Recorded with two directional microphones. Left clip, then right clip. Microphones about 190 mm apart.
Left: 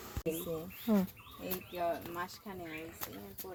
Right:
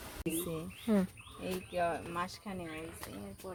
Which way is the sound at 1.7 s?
25° right (ahead or behind).